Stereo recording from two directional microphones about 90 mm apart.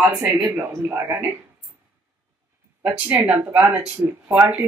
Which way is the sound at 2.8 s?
20° right (ahead or behind).